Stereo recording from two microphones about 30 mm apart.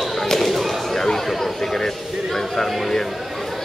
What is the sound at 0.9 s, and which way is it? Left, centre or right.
Speech, centre.